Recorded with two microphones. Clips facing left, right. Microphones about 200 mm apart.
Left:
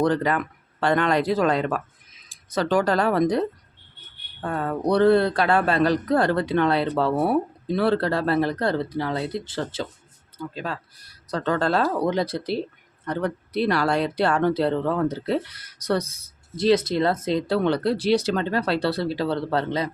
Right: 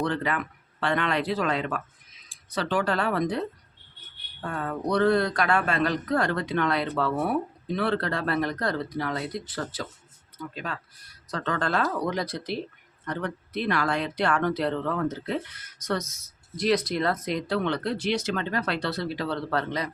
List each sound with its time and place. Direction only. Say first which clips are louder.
0.0 s speech: left 6 dB; 40° left (ahead or behind)